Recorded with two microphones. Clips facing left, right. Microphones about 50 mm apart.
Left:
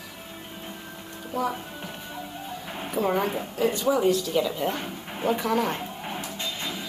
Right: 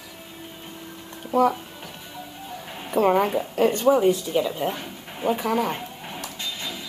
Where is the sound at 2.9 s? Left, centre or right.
Right.